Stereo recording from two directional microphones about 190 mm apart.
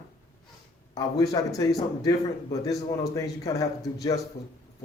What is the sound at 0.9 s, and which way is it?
Speech, 20° left (ahead or behind).